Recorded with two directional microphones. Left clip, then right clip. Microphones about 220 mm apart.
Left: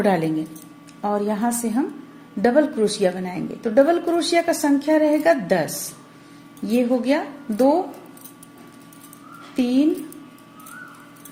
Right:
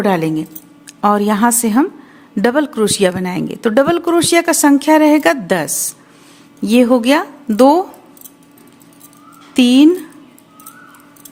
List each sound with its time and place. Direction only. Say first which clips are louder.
0.0 s speech: right 5 dB; 25° right (ahead or behind)
1.0 s speech: right 10 dB; 35° right (ahead or behind)
9.6 s speech: right 10 dB; 35° right (ahead or behind)